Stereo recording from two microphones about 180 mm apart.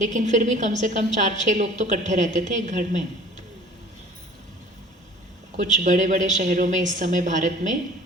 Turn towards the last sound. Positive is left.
turn(degrees=-45)  # may be behind; listen again after turning